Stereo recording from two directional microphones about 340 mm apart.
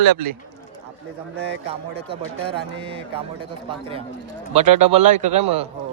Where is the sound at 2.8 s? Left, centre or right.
Centre.